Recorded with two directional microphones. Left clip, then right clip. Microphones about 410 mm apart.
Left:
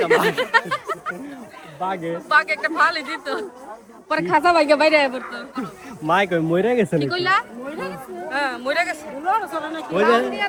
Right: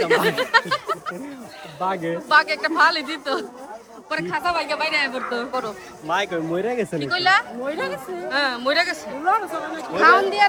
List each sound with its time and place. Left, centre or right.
0.0 s speech: centre
4.1 s a man's voice: centre
5.3 s speech: centre
6.1 s speech: centre
9.9 s speech: centre